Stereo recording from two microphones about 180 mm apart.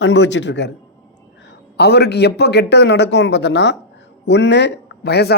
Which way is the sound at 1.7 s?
65° left (ahead or behind).